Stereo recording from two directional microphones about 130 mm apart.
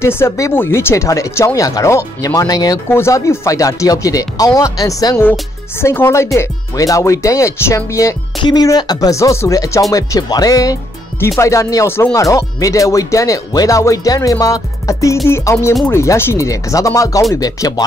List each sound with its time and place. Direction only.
0.0 s speech: 20° left (ahead or behind)